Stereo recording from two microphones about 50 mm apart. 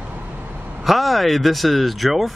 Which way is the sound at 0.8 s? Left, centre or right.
Centre.